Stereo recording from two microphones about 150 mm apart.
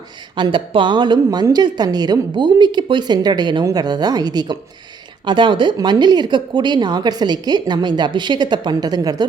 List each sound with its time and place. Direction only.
0.3 s a woman's voice: 30° right (ahead or behind)